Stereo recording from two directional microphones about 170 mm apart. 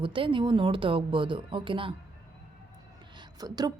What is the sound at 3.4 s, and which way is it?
Speech, 25° right (ahead or behind).